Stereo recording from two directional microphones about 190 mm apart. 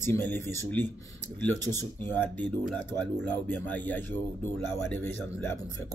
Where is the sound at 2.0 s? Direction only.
10° left (ahead or behind).